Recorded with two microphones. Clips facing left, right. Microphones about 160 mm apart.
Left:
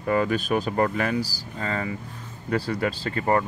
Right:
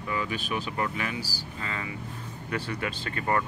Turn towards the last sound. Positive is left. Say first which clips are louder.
# left 5 dB
turn(degrees=30)  # may be behind; listen again after turning